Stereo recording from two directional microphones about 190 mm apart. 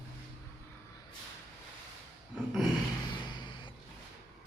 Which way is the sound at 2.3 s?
Centre (ahead or behind).